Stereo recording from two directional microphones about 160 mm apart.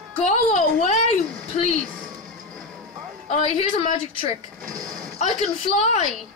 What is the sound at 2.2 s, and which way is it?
Vehicle, 55° right (ahead or behind).